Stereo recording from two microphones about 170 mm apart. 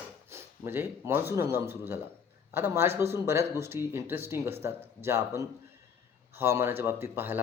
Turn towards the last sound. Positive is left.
turn(degrees=-15)  # may be behind; listen again after turning